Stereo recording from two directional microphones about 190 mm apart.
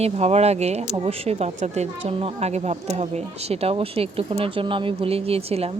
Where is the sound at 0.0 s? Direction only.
35° right (ahead or behind).